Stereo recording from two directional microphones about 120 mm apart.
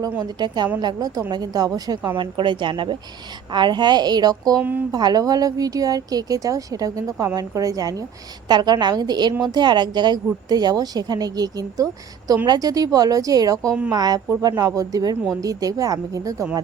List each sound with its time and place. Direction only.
0.2 s a woman's voice: 35° right (ahead or behind)
4.6 s speech: 15° right (ahead or behind)
4.9 s a woman's voice: 35° right (ahead or behind)